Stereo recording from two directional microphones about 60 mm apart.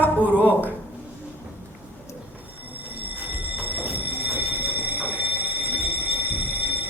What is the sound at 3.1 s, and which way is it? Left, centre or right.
Train, right.